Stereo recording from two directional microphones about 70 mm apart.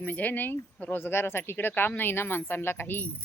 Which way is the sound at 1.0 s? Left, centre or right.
Left.